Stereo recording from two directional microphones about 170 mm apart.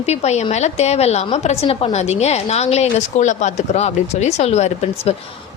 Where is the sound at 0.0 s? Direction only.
40° left (ahead or behind).